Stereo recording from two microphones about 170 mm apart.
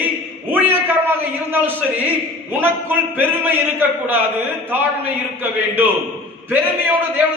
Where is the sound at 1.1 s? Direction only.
10° right (ahead or behind).